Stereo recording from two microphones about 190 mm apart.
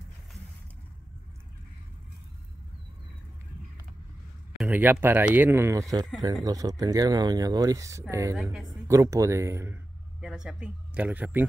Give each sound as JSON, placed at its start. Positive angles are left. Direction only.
{"t": 4.6, "sound": "speech", "side_deg": -10}
{"t": 8.4, "sound": "a woman's voice", "side_deg": 0}
{"t": 8.8, "sound": "speech", "side_deg": -15}
{"t": 10.2, "sound": "speech", "side_deg": -5}